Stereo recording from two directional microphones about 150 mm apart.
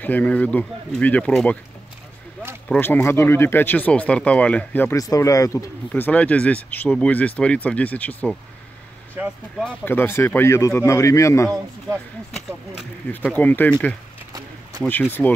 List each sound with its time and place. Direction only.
0.0 s speech: 10° left (ahead or behind)
2.7 s speech: 15° left (ahead or behind)
6.0 s speech: 10° left (ahead or behind)
9.1 s speech: 10° right (ahead or behind)
9.7 s speech: 15° left (ahead or behind)
13.1 s speech: 10° left (ahead or behind)